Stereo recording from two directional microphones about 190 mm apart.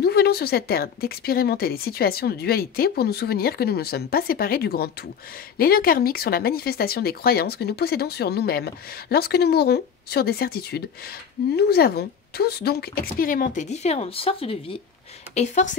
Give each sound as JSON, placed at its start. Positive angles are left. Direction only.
{"t": 0.0, "sound": "a woman's voice", "side_deg": 55}